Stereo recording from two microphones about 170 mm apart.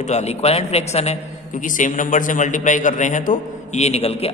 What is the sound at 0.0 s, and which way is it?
A man's voice, 40° left (ahead or behind).